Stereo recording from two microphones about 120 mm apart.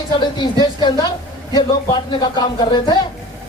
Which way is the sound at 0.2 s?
35° left (ahead or behind).